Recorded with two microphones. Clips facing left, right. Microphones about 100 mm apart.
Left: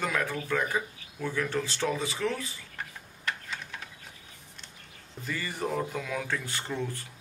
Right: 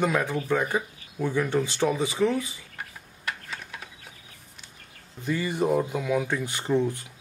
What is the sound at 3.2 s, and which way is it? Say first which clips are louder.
Typing: right 1 dB; 5° right (ahead or behind).